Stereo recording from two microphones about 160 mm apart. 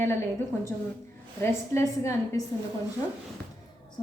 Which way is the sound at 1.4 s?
15° left (ahead or behind).